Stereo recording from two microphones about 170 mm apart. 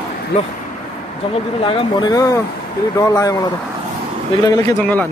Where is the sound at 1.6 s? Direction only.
30° left (ahead or behind).